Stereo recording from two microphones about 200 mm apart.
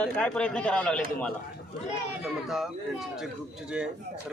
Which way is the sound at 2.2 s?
Centre (ahead or behind).